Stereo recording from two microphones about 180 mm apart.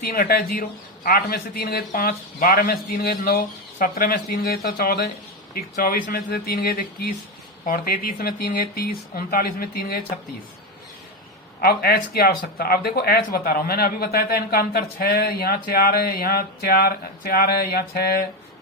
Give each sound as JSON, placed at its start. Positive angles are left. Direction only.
{"t": 0.0, "sound": "speech", "side_deg": 55}
{"t": 11.6, "sound": "speech", "side_deg": 60}